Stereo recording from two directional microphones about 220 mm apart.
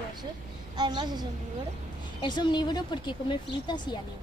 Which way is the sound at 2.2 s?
20° left (ahead or behind).